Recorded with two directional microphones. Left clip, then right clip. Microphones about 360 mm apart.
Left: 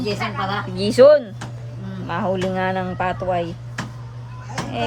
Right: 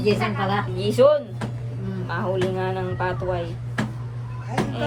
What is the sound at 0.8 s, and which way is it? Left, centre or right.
Speech, left.